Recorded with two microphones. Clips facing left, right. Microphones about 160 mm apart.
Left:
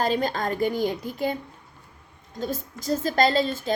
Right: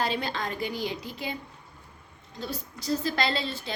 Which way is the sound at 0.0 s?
45° left (ahead or behind).